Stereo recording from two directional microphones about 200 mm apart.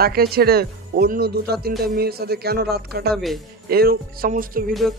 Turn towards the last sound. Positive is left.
turn(degrees=-45)  # may be behind; listen again after turning